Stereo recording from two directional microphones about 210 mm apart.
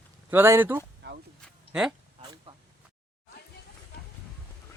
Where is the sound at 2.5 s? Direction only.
25° right (ahead or behind).